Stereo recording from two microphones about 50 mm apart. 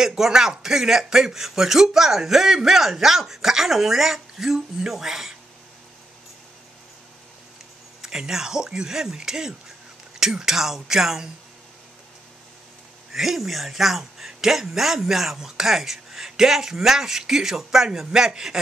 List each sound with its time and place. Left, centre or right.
0.0 s a man's voice: centre
8.0 s a man's voice: centre
13.1 s a man's voice: centre